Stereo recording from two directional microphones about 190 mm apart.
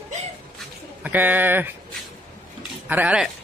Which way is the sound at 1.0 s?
10° right (ahead or behind).